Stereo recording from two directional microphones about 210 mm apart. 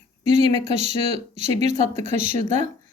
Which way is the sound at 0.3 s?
30° right (ahead or behind).